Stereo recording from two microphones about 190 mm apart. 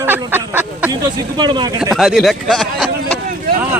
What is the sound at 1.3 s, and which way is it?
Speech, 25° right (ahead or behind).